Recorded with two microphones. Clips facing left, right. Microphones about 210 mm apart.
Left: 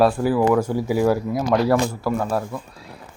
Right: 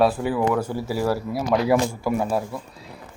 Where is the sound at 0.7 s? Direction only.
15° left (ahead or behind).